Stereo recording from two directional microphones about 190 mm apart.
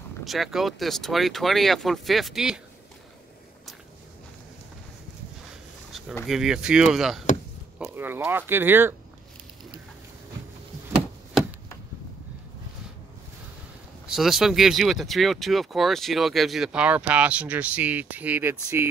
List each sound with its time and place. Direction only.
0.2 s speech: centre (ahead or behind)
5.9 s a sound: centre (ahead or behind)
6.2 s speech: 5° right (ahead or behind)
14.0 s speech: centre (ahead or behind)